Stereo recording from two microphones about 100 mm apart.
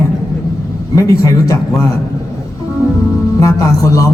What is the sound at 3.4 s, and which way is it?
Speech, 35° left (ahead or behind).